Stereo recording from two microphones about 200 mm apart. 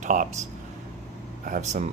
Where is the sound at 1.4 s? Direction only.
40° right (ahead or behind).